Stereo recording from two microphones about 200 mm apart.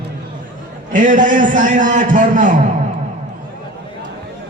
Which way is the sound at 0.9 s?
40° right (ahead or behind).